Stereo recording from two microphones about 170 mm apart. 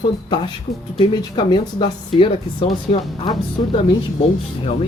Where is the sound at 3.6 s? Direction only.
35° left (ahead or behind).